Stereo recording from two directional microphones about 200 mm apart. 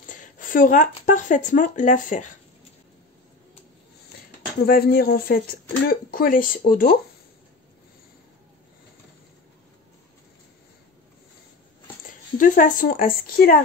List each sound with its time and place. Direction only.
0.1 s speech: 40° left (ahead or behind)
4.6 s speech: 50° left (ahead or behind)
12.1 s speech: 40° left (ahead or behind)